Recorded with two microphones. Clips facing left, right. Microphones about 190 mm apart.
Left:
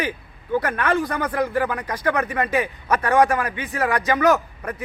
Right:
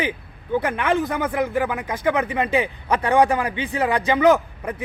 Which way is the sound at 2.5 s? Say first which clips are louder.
Right 1 dB; 25° right (ahead or behind).